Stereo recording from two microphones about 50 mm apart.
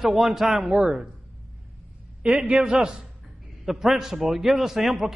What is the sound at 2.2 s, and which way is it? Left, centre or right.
Speech, centre.